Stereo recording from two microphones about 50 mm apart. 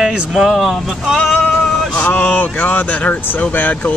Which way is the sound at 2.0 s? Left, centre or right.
Left.